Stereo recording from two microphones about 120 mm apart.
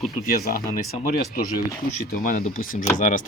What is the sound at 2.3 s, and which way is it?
Speech, 90° left.